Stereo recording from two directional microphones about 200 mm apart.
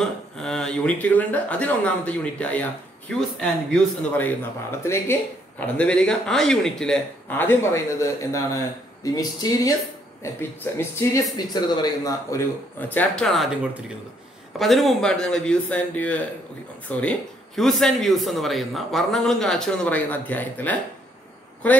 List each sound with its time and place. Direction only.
0.0 s speech: 5° left (ahead or behind)
9.0 s a sound: 20° left (ahead or behind)
10.2 s a man's voice: 15° left (ahead or behind)